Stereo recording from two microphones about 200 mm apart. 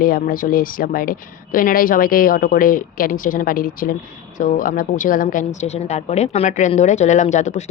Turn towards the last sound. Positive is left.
turn(degrees=35)  # may be behind; listen again after turning